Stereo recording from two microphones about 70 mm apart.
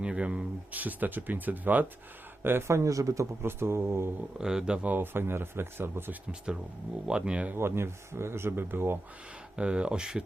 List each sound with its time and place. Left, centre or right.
0.0 s speech: centre; by 3.2 s right
3.4 s speech: right
4.4 s speech: centre
4.9 s speech: right
7.1 s speech: centre
7.5 s speech: right
9.6 s speech: centre